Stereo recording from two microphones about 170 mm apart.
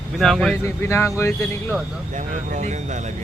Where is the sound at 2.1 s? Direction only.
45° right (ahead or behind).